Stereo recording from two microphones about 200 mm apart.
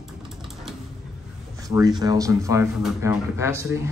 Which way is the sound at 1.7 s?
20° right (ahead or behind).